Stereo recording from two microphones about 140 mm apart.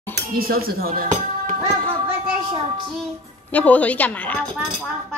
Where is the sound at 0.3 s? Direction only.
90° right.